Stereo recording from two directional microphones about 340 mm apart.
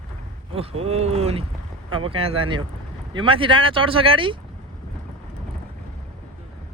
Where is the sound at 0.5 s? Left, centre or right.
Centre.